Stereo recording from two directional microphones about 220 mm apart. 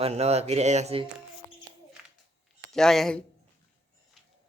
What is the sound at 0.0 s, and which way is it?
Speech, 30° right (ahead or behind).